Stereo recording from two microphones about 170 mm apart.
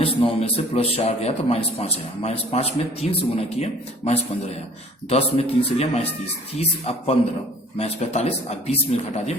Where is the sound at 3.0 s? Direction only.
5° right (ahead or behind).